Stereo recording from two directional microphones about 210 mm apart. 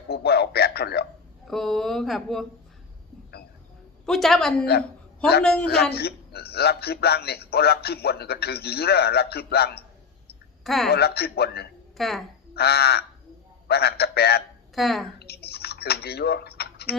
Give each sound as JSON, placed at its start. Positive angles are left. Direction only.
{"t": 0.1, "sound": "a sound", "side_deg": 50}
{"t": 1.5, "sound": "speech", "side_deg": 0}
{"t": 4.0, "sound": "speech", "side_deg": 0}
{"t": 5.6, "sound": "a man's voice", "side_deg": 50}
{"t": 10.6, "sound": "a woman's voice", "side_deg": 0}
{"t": 10.8, "sound": "a man's voice", "side_deg": 50}
{"t": 11.9, "sound": "speech", "side_deg": 0}
{"t": 12.5, "sound": "a man's voice", "side_deg": 50}
{"t": 14.8, "sound": "speech", "side_deg": 0}
{"t": 15.2, "sound": "tick", "side_deg": 50}